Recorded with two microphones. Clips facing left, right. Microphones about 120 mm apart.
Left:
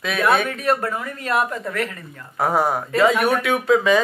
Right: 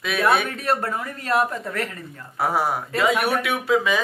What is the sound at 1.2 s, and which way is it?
Speech, 35° right (ahead or behind).